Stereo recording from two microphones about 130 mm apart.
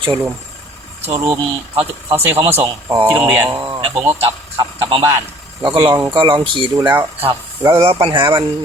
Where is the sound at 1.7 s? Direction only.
45° right (ahead or behind).